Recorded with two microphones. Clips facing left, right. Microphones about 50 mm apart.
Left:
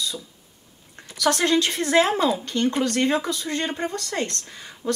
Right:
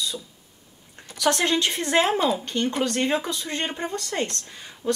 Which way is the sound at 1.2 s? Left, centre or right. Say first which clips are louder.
Left 2 dB; right.